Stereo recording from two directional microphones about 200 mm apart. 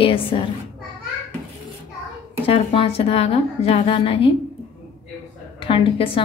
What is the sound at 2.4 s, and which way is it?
A woman's voice, 25° left (ahead or behind).